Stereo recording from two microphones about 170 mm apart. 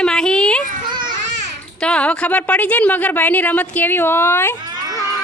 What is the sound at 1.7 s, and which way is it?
A woman's voice, 5° left (ahead or behind).